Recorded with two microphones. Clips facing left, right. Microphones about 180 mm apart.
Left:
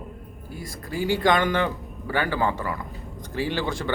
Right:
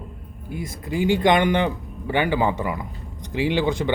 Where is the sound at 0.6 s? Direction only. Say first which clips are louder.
Right 5 dB; 20° right (ahead or behind).